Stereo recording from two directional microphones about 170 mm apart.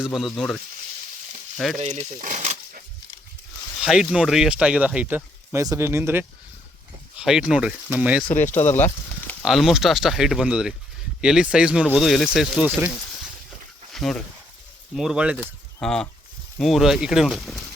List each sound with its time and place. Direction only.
0.0 s speech: centre (ahead or behind)
1.8 s a sound: 40° right (ahead or behind)
3.8 s speech: 5° right (ahead or behind)
7.2 s speech: 5° right (ahead or behind)
8.7 s speech: 10° left (ahead or behind)
9.4 s speech: centre (ahead or behind)
13.9 s speech: centre (ahead or behind)
15.8 s speech: 5° left (ahead or behind)